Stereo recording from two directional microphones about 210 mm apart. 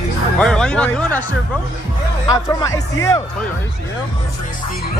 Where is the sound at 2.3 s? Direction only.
15° left (ahead or behind).